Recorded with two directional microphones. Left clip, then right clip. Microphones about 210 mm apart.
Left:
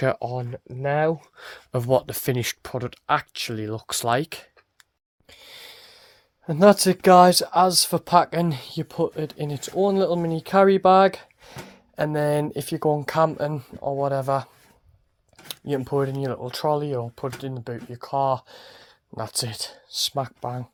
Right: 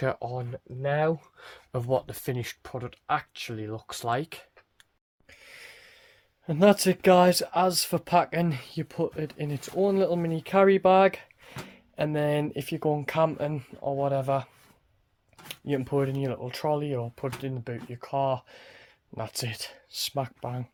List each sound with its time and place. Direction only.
0.0 s speech: 30° left (ahead or behind)
5.3 s speech: 20° left (ahead or behind)